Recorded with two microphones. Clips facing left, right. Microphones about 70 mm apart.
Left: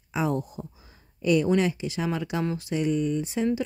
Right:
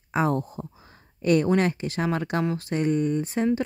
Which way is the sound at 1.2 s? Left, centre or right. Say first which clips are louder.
Right 1 dB; right.